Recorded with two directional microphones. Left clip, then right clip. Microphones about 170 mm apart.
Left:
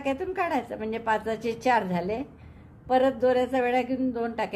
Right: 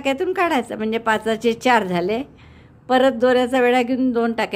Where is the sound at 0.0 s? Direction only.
40° right (ahead or behind).